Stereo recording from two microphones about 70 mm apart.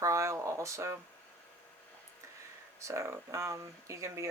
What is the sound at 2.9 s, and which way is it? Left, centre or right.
Speech, right.